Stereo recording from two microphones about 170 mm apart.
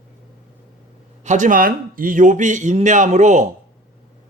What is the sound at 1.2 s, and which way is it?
Speech, 50° right (ahead or behind).